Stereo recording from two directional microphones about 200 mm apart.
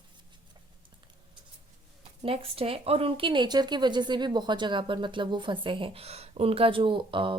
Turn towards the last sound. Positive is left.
turn(degrees=-25)  # may be behind; listen again after turning